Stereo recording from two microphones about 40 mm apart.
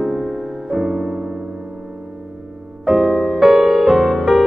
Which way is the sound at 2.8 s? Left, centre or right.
Centre.